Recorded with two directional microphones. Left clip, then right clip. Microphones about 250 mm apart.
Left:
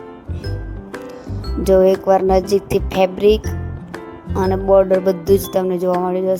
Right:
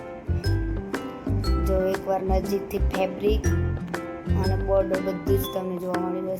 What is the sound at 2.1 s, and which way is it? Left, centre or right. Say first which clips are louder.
Speech: left 11 dB; left.